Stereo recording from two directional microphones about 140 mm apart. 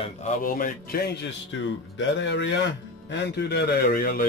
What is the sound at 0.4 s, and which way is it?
Speech, 90° left.